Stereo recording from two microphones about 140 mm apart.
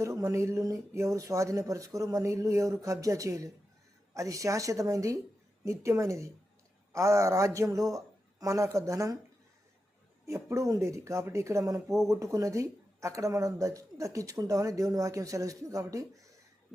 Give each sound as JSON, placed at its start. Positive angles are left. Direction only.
{"t": 0.0, "sound": "speech", "side_deg": -20}
{"t": 10.2, "sound": "speech", "side_deg": -20}